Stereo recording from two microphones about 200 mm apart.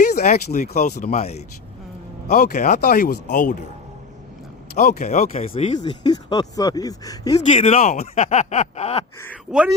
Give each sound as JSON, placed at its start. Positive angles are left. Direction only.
{"t": 0.0, "sound": "speech", "side_deg": 45}
{"t": 4.8, "sound": "speech", "side_deg": 40}
{"t": 5.8, "sound": "speech", "side_deg": 20}
{"t": 7.3, "sound": "speech", "side_deg": 30}
{"t": 9.5, "sound": "speech", "side_deg": -5}